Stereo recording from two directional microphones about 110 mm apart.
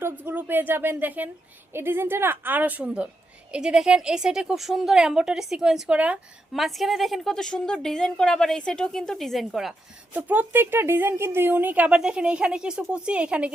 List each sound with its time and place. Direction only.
0.0 s a woman's voice: 20° right (ahead or behind); by 9.7 s centre (ahead or behind)
10.2 s a woman's voice: 15° right (ahead or behind)